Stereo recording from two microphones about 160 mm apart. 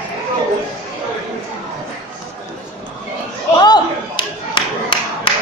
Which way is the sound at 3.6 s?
30° left (ahead or behind).